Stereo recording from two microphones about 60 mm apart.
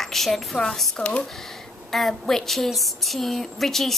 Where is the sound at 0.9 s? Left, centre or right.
Left.